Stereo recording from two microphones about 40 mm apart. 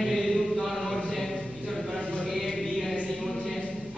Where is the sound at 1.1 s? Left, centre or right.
Centre.